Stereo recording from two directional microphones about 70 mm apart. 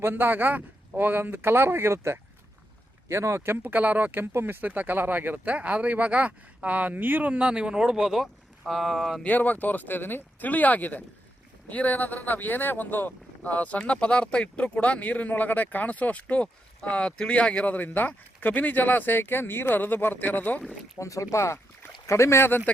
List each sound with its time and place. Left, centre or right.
0.0 s a man's voice: right
4.6 s speech: right; by 9.2 s centre
9.2 s speech: left
21.0 s speech: left